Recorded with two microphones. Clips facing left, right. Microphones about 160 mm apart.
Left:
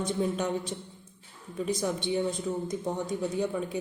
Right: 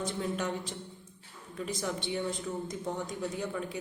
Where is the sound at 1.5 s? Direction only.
20° left (ahead or behind).